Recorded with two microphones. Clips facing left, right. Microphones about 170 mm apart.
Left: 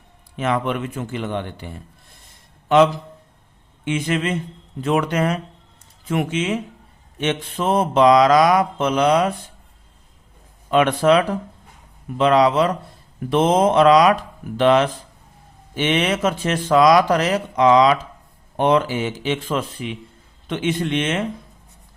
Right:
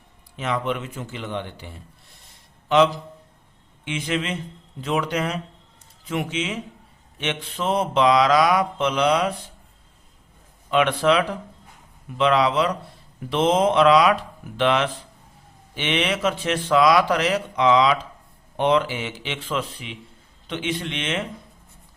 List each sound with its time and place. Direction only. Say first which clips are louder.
0.3 s a man's voice: left 4 dB; 55° left (ahead or behind)
10.7 s speech: left 4 dB; 45° left (ahead or behind)